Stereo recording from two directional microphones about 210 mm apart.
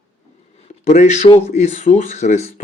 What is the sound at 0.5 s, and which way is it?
Speech, 30° left (ahead or behind).